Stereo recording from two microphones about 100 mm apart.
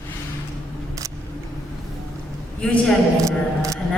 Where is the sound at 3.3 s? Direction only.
35° right (ahead or behind).